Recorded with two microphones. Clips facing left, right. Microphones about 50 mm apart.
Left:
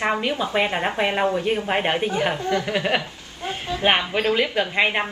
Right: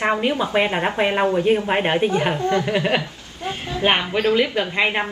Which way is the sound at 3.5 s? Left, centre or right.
Right.